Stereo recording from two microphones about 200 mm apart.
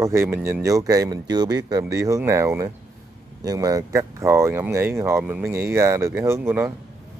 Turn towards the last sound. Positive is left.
turn(degrees=-10)  # may be behind; listen again after turning